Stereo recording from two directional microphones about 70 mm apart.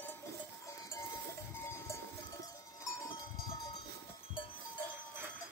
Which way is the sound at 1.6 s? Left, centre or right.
Left.